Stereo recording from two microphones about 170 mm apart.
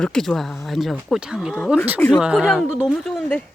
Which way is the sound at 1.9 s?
10° left (ahead or behind).